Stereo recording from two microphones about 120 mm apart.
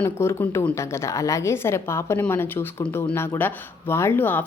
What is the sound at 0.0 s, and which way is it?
A woman's voice, 20° left (ahead or behind).